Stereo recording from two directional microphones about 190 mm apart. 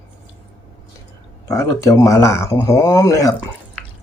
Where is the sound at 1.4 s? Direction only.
15° left (ahead or behind).